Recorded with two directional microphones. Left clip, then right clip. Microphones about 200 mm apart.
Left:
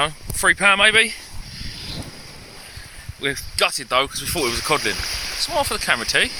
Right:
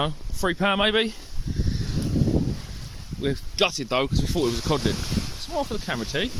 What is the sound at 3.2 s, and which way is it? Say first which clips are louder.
Speech: left 3 dB; 10° right (ahead or behind).